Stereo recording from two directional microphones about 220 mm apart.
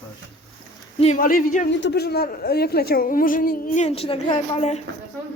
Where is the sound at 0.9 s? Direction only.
30° left (ahead or behind).